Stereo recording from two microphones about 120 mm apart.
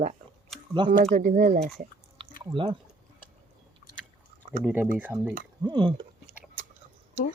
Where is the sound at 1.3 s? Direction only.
80° right.